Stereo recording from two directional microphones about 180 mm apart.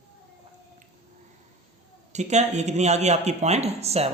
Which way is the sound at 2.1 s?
40° right (ahead or behind).